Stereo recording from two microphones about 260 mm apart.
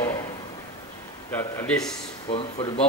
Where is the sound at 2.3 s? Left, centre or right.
Left.